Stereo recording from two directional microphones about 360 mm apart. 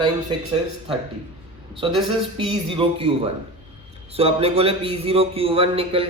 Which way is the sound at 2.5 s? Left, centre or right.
Centre.